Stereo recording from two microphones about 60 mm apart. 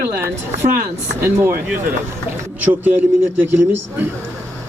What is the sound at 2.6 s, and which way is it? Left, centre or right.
A man's voice, right.